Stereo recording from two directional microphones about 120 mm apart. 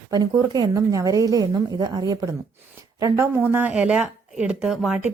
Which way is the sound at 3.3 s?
15° right (ahead or behind).